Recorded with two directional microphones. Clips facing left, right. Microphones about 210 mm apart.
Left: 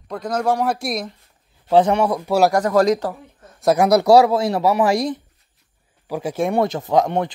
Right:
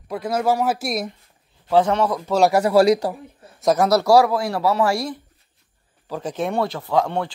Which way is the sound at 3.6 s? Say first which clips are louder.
Left 2 dB; 15° left (ahead or behind).